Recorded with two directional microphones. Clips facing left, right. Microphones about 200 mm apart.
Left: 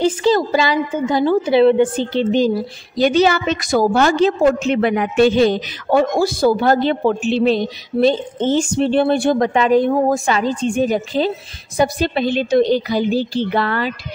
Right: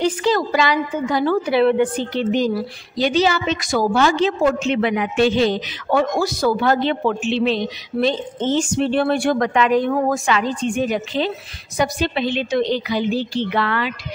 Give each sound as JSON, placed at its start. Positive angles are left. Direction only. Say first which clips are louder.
{"t": 0.0, "sound": "a woman's voice", "louder": "left 3 dB", "side_deg": 30}
{"t": 3.0, "sound": "a woman's voice", "louder": "left 4 dB", "side_deg": 50}